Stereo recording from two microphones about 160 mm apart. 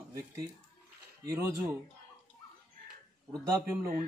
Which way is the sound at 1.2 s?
20° right (ahead or behind).